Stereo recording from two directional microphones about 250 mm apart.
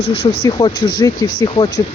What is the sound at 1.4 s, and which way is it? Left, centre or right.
Speech, centre.